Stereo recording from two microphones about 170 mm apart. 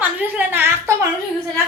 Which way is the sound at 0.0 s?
10° right (ahead or behind).